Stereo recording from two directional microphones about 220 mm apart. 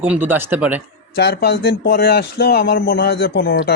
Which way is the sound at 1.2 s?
50° left (ahead or behind).